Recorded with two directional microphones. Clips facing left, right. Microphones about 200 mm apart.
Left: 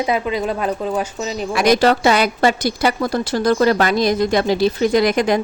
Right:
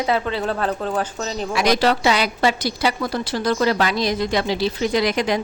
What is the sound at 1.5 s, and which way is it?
A woman's voice, 50° left (ahead or behind).